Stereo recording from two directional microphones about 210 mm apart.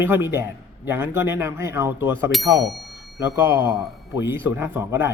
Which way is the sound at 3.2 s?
15° right (ahead or behind).